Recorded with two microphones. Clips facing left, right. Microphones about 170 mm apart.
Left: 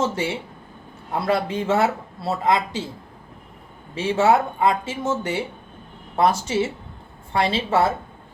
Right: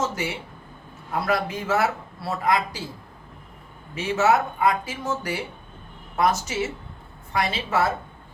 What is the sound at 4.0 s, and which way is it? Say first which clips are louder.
Speech: left 3 dB; 30° left (ahead or behind).